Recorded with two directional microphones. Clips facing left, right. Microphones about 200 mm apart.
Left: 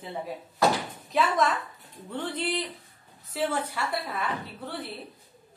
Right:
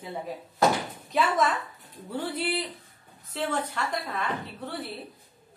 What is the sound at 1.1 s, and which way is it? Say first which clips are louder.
A woman's voice: even; centre (ahead or behind).